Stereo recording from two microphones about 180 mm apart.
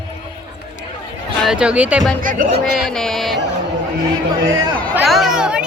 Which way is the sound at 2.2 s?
50° right (ahead or behind).